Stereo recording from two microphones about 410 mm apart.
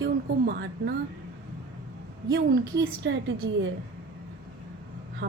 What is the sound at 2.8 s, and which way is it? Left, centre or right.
Speech, right.